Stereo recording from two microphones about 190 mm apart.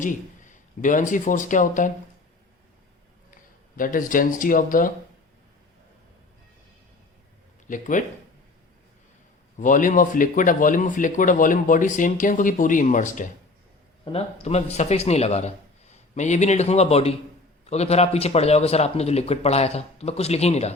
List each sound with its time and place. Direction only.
0.0 s speech: 40° left (ahead or behind)
3.8 s speech: 45° left (ahead or behind)
7.7 s speech: 40° left (ahead or behind)
9.6 s a man's voice: 45° left (ahead or behind)